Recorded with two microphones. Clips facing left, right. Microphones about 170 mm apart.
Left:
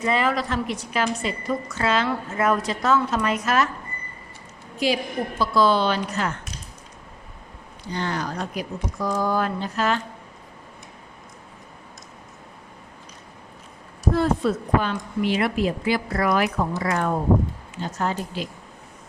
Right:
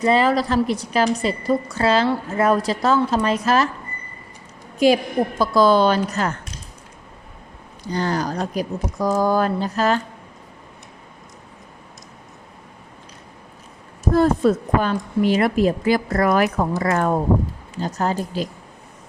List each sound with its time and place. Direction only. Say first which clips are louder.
0.0 s a woman's voice: right 5 dB; 35° right (ahead or behind)
4.8 s a woman's voice: right 7 dB; 50° right (ahead or behind)
7.9 s a woman's voice: right 5 dB; 40° right (ahead or behind)
14.1 s a woman's voice: right 5 dB; 45° right (ahead or behind)